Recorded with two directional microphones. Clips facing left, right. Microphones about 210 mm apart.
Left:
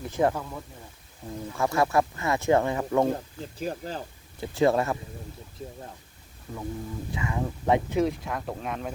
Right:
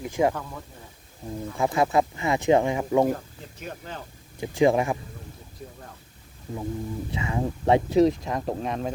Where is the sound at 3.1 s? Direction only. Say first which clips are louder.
Left 5 dB; 35° left (ahead or behind).